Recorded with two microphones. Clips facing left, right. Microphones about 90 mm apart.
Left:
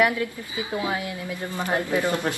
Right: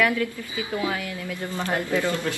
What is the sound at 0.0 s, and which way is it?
Speech, 25° left (ahead or behind).